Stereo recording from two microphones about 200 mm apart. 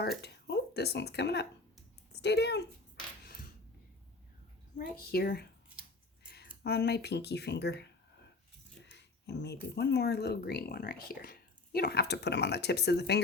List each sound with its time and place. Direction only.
0.2 s speech: 55° left (ahead or behind)
4.8 s a woman's voice: 50° left (ahead or behind)
6.2 s a sound: 55° left (ahead or behind)
6.6 s speech: 55° left (ahead or behind)
8.9 s speech: 55° left (ahead or behind)